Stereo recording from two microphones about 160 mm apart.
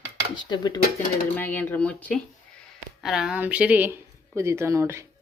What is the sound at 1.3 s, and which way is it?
A woman's voice, 10° left (ahead or behind).